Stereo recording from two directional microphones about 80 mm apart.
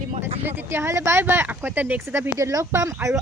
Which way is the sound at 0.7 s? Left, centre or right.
Right.